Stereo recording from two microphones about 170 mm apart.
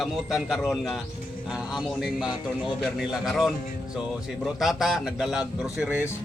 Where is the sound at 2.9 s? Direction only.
Centre (ahead or behind).